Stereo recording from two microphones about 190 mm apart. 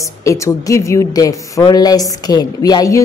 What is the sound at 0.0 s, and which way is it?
A woman's voice, 15° left (ahead or behind).